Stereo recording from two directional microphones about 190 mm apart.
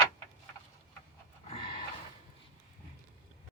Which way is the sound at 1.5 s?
25° left (ahead or behind).